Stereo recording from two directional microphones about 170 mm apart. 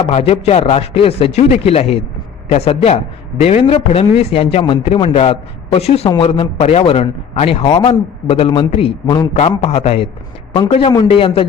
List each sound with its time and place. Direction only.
0.1 s a man's voice: 35° left (ahead or behind)